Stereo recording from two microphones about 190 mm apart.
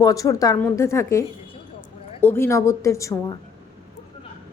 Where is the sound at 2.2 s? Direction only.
10° left (ahead or behind).